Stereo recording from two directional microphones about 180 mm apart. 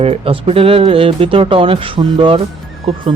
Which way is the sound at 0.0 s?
35° right (ahead or behind).